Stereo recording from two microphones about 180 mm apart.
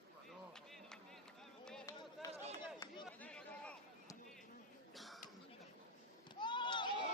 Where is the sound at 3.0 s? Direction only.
5° left (ahead or behind).